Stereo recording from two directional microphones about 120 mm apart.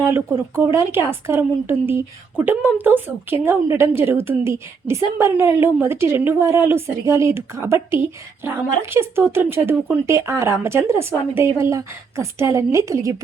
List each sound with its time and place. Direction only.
0.1 s speech: 25° right (ahead or behind)